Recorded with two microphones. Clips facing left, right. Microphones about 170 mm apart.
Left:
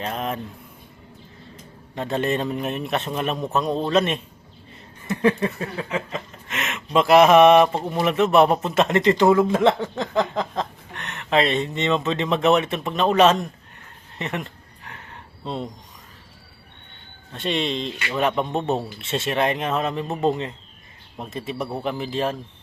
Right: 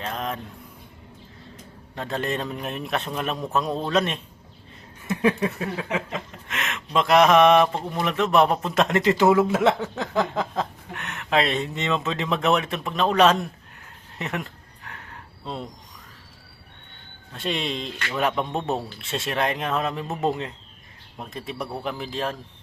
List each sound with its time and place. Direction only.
0.0 s a man's voice: 5° left (ahead or behind)
2.0 s a man's voice: centre (ahead or behind)
14.2 s a sound: centre (ahead or behind)
17.3 s a man's voice: centre (ahead or behind)